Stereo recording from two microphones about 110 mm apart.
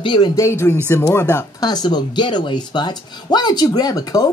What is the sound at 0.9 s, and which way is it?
Speech, 20° left (ahead or behind).